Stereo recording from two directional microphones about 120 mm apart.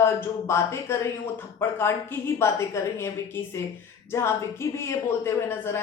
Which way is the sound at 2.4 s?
25° left (ahead or behind).